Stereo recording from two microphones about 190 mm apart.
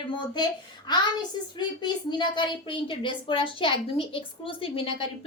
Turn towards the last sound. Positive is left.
turn(degrees=30)  # may be behind; listen again after turning